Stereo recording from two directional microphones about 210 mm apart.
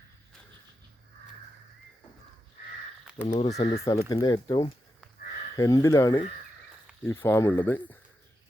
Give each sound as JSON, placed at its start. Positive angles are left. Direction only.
{"t": 3.2, "sound": "speech", "side_deg": 30}
{"t": 3.6, "sound": "speech", "side_deg": 20}